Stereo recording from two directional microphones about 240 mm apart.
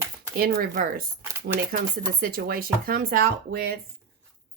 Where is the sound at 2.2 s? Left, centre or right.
Right.